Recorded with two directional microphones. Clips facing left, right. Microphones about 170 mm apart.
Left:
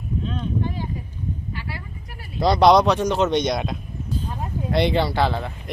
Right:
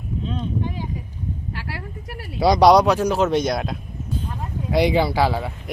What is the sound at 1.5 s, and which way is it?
Speech, 80° right.